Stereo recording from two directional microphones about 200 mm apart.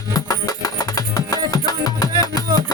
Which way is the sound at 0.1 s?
15° left (ahead or behind).